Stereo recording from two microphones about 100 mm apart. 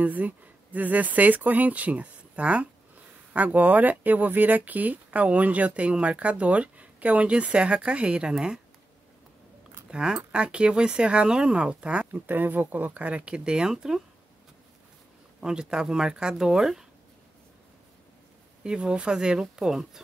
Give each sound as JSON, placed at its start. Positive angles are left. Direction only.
{"t": 0.0, "sound": "speech", "side_deg": -15}
{"t": 9.8, "sound": "speech", "side_deg": -10}
{"t": 15.4, "sound": "speech", "side_deg": -5}
{"t": 18.6, "sound": "speech", "side_deg": -10}